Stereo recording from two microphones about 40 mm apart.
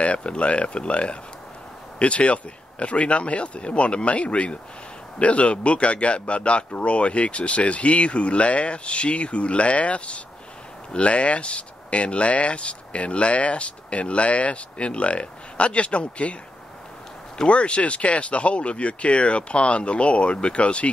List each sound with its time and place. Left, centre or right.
0.0 s speech: left
17.5 s speech: left